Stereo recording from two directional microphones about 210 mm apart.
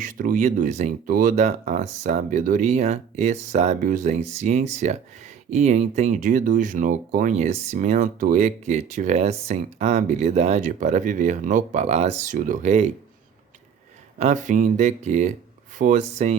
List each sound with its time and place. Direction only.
0.0 s speech: 40° right (ahead or behind)
14.2 s speech: 35° right (ahead or behind)